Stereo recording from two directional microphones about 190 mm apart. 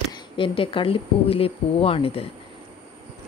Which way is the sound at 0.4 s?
25° left (ahead or behind).